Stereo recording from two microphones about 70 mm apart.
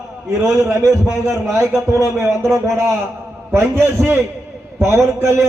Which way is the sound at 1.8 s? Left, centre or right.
Centre.